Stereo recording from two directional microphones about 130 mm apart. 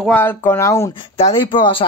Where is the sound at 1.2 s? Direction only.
45° left (ahead or behind).